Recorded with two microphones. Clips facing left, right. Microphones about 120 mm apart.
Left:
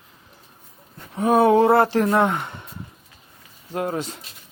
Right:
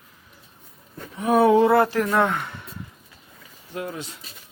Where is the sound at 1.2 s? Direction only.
30° left (ahead or behind).